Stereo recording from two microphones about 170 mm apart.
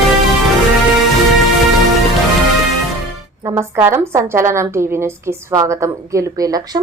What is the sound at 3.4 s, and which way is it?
A woman's voice, 15° right (ahead or behind).